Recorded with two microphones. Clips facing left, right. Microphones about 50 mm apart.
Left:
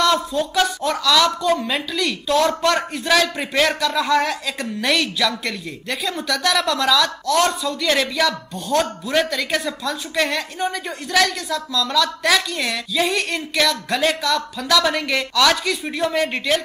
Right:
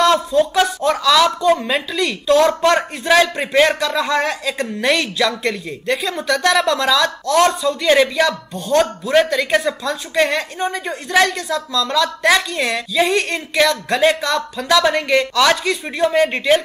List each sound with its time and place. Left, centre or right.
0.0 s speech: centre
7.9 s speech: centre
8.3 s speech: centre